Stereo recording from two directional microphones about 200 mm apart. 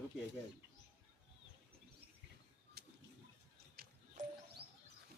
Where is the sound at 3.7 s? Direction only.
45° right (ahead or behind).